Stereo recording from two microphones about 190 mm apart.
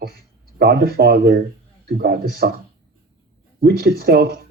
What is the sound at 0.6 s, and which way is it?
A man's voice, 55° right (ahead or behind).